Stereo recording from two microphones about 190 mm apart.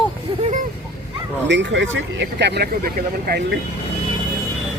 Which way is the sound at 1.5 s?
70° right (ahead or behind).